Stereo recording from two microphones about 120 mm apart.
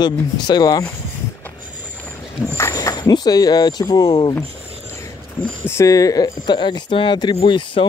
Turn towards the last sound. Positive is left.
turn(degrees=45)  # may be behind; listen again after turning